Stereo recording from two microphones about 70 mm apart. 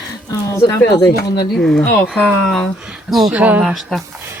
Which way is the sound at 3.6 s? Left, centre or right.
Centre.